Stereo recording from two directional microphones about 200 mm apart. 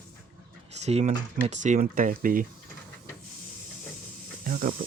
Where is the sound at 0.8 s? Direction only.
35° right (ahead or behind).